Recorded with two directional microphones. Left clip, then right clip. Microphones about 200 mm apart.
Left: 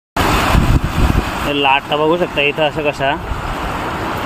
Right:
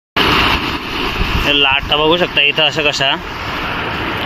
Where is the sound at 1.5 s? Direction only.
5° left (ahead or behind).